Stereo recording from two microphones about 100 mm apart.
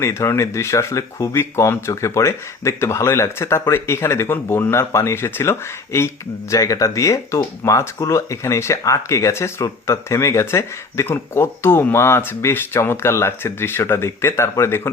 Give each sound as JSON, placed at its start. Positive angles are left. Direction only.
{"t": 0.0, "sound": "speech", "side_deg": 30}